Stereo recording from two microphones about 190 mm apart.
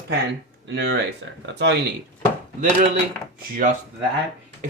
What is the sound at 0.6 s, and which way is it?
Speech, 55° right (ahead or behind).